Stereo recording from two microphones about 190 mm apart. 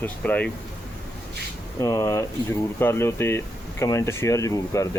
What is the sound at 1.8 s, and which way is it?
Speech, 15° left (ahead or behind).